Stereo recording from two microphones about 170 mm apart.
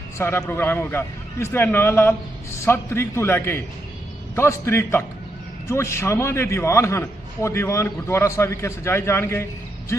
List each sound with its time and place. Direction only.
0.4 s a man's voice: 15° left (ahead or behind)